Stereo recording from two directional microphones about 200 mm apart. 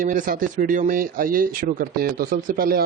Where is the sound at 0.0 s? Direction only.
40° right (ahead or behind).